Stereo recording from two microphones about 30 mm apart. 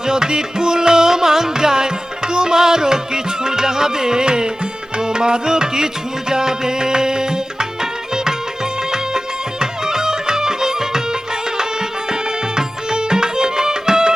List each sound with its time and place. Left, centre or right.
0.0 s music: right